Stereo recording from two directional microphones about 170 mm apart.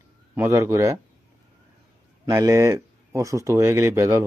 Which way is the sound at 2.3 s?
20° right (ahead or behind).